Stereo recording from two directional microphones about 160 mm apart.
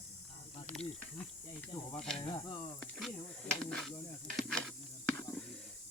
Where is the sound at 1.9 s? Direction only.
5° left (ahead or behind).